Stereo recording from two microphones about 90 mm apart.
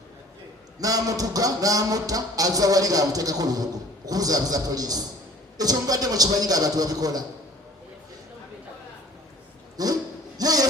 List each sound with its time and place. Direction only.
0.8 s a man's voice: 40° right (ahead or behind)
9.8 s speech: 45° right (ahead or behind)
10.3 s a sound: 45° right (ahead or behind)